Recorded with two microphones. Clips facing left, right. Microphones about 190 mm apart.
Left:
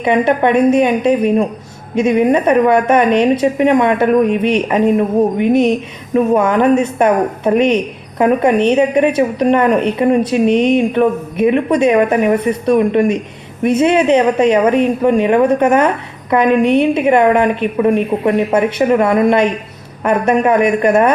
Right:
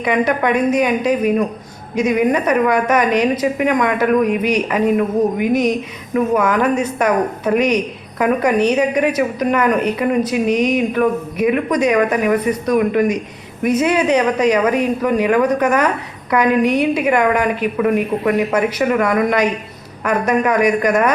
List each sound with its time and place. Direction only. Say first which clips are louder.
0.0 s a woman's voice: left 4 dB; 25° left (ahead or behind)